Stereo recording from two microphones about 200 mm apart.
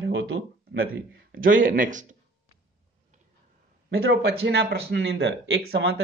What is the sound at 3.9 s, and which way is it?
Speech, 85° right.